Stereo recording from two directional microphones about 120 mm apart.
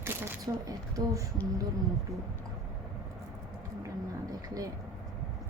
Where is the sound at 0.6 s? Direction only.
30° right (ahead or behind).